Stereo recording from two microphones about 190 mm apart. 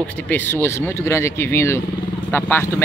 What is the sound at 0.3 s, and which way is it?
Speech, 10° left (ahead or behind).